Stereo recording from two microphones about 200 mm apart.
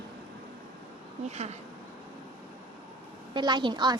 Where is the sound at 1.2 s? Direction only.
35° right (ahead or behind).